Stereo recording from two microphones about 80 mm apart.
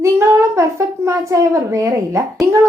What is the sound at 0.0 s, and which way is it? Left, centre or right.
A woman's voice, right.